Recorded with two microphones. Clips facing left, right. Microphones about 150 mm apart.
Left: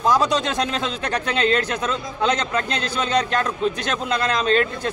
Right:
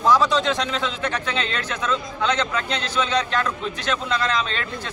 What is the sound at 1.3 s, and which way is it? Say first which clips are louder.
A man's voice: left 7 dB; 45° left (ahead or behind).